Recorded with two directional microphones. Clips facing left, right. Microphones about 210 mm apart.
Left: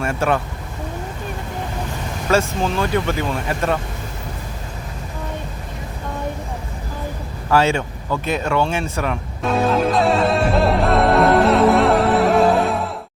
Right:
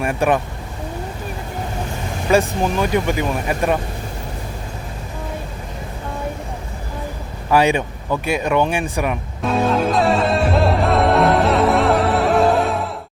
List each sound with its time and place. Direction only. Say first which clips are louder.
0.0 s speech: right 2 dB; 15° right (ahead or behind)
2.3 s speech: right 2 dB; 15° right (ahead or behind)
7.5 s speech: right 1 dB; 15° right (ahead or behind)
9.4 s music: even; centre (ahead or behind)